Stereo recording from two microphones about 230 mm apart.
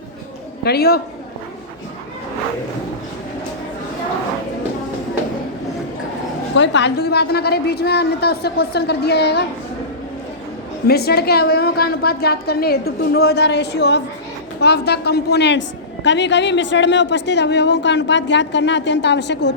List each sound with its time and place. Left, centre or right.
0.6 s a woman's voice: left
6.6 s a woman's voice: left
10.8 s a woman's voice: left